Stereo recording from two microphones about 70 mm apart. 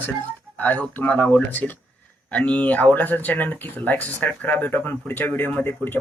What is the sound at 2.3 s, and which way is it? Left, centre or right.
Speech, left.